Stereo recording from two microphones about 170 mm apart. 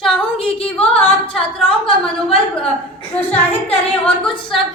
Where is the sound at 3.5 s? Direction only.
35° left (ahead or behind).